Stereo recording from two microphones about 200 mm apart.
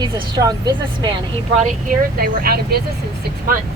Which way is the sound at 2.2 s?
50° right (ahead or behind).